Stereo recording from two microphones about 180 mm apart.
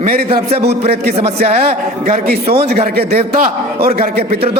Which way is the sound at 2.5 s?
35° right (ahead or behind).